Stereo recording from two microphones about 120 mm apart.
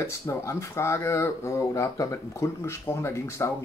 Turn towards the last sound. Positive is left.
turn(degrees=25)  # may be behind; listen again after turning